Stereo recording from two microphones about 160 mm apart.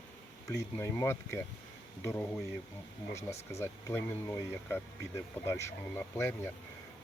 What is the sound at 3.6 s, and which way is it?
Speech, 15° left (ahead or behind).